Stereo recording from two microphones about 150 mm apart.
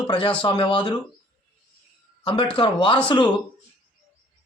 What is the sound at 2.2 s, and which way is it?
Speech, 35° left (ahead or behind).